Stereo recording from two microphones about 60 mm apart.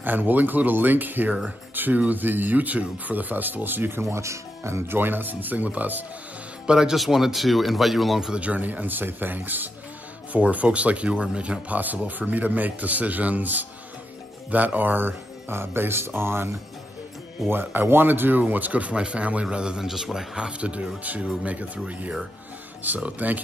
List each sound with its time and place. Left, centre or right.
0.0 s speech: right
4.0 s speech: right
6.6 s speech: centre
8.3 s speech: right